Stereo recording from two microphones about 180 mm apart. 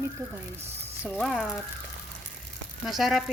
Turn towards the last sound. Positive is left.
turn(degrees=0)  # may be behind; listen again after turning